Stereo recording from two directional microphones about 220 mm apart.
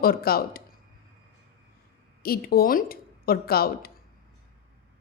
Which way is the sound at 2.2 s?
45° left (ahead or behind).